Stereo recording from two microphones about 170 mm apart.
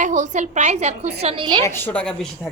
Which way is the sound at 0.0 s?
45° right (ahead or behind).